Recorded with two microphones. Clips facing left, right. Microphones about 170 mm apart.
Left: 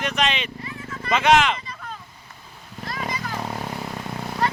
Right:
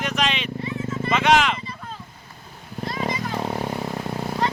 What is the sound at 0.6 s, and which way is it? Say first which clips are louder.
Vehicle: right 8 dB; 25° right (ahead or behind).